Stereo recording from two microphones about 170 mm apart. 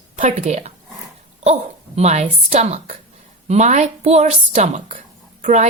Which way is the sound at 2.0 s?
40° right (ahead or behind).